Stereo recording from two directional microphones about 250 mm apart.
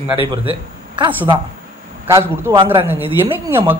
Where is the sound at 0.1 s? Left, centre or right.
Centre.